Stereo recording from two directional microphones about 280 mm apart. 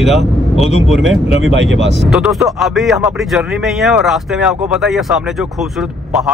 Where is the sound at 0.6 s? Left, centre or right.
Left.